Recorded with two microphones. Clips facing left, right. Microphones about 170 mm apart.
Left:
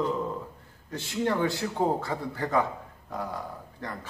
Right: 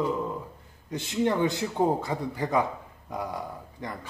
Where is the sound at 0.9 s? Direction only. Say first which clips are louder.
Right 2 dB; 20° right (ahead or behind).